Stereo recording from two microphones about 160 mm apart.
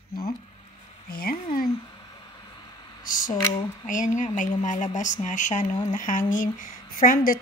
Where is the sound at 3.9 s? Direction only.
55° left (ahead or behind).